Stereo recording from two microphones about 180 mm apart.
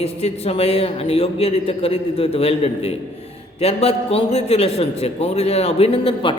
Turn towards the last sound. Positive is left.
turn(degrees=30)  # may be behind; listen again after turning